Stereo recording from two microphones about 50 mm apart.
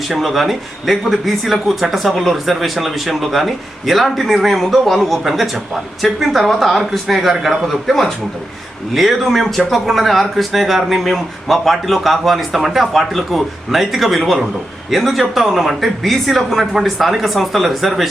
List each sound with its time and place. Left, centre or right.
0.1 s a man's voice: centre
9.0 s a man's voice: centre